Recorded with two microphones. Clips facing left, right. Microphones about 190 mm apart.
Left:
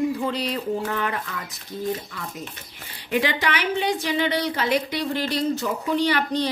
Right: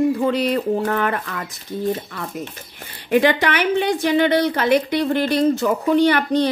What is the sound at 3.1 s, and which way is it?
A woman's voice, 55° right (ahead or behind).